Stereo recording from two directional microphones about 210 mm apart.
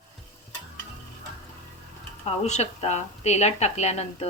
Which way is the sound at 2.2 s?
30° left (ahead or behind).